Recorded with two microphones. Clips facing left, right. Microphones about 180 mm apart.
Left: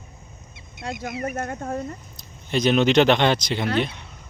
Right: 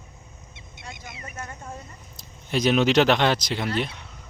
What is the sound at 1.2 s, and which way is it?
Speech, 65° left (ahead or behind).